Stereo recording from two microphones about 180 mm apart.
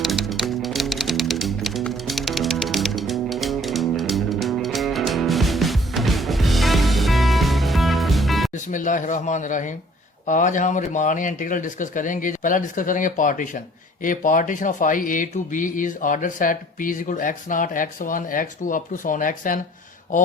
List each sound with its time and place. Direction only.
0.0 s music: centre (ahead or behind)
8.5 s speech: 45° left (ahead or behind)